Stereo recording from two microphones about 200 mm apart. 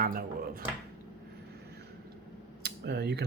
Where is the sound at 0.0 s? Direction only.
45° right (ahead or behind).